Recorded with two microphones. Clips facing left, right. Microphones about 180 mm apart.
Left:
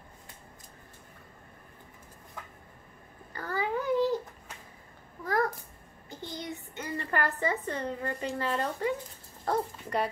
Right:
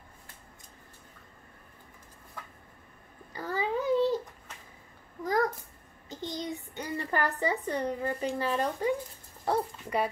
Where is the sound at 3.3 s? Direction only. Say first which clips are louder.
Right 1 dB; 10° right (ahead or behind).